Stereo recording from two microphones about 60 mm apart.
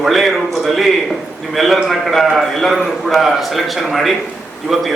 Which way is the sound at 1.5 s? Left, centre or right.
Centre.